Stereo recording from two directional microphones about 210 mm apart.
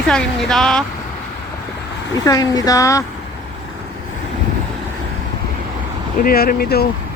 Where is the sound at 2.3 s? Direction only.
15° left (ahead or behind).